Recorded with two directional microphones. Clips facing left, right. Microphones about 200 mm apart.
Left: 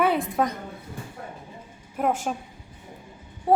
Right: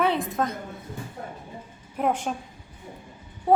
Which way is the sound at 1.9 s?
5° left (ahead or behind).